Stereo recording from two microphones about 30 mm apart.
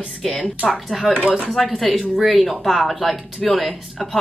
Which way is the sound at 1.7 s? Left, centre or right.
Centre.